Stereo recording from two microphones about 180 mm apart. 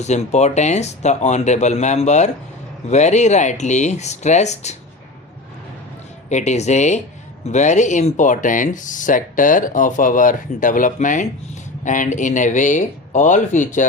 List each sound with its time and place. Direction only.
0.0 s speech: 40° left (ahead or behind)
6.2 s speech: 40° left (ahead or behind)